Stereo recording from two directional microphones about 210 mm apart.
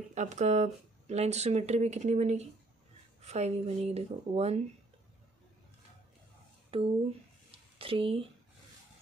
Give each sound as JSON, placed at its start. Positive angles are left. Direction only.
{"t": 0.1, "sound": "speech", "side_deg": -35}
{"t": 6.7, "sound": "speech", "side_deg": -25}